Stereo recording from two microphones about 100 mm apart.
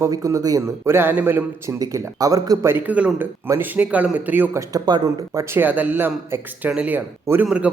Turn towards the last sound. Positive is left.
turn(degrees=-10)  # may be behind; listen again after turning